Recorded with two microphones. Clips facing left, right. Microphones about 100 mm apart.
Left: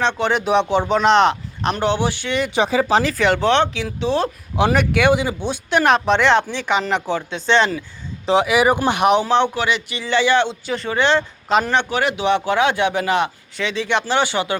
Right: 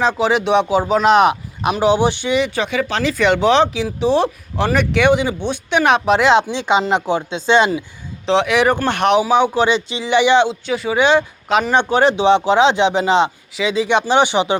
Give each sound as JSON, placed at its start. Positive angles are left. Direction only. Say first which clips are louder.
{"t": 0.0, "sound": "speech", "louder": "right 3 dB", "side_deg": -5}
{"t": 2.0, "sound": "speech", "louder": "right 5 dB", "side_deg": -20}
{"t": 2.6, "sound": "speech", "louder": "left 3 dB", "side_deg": 30}
{"t": 3.0, "sound": "speech", "louder": "right 2 dB", "side_deg": 0}
{"t": 3.5, "sound": "speech", "louder": "right 3 dB", "side_deg": -15}
{"t": 4.5, "sound": "speech", "louder": "left 1 dB", "side_deg": 10}
{"t": 5.8, "sound": "speech", "louder": "right 2 dB", "side_deg": -5}
{"t": 6.3, "sound": "speech", "louder": "right 3 dB", "side_deg": -20}
{"t": 8.3, "sound": "speech", "louder": "right 1 dB", "side_deg": 5}
{"t": 9.1, "sound": "speech", "louder": "right 2 dB", "side_deg": -5}
{"t": 9.6, "sound": "speech", "louder": "right 5 dB", "side_deg": -25}
{"t": 10.5, "sound": "speech", "louder": "right 4 dB", "side_deg": -5}
{"t": 11.4, "sound": "speech", "louder": "right 1 dB", "side_deg": 0}
{"t": 11.7, "sound": "speech", "louder": "right 5 dB", "side_deg": -20}